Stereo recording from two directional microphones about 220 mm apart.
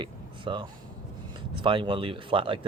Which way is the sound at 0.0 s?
20° right (ahead or behind).